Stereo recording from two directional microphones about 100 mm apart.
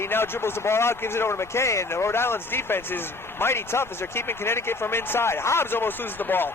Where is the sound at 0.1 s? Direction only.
25° left (ahead or behind).